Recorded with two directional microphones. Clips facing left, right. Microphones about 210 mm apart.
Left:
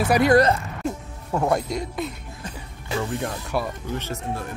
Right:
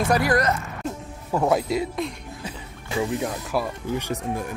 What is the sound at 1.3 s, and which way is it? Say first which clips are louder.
Speech: right 1 dB; centre (ahead or behind).